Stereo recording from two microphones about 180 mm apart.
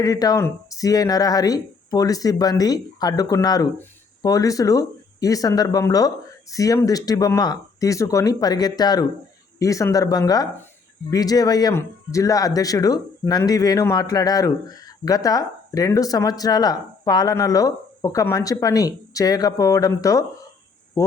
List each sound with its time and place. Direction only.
0.0 s speech: 20° left (ahead or behind)